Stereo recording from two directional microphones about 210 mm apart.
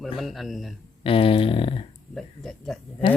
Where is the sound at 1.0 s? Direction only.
25° left (ahead or behind).